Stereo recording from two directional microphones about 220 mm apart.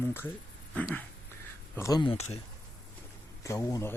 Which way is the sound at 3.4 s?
15° left (ahead or behind).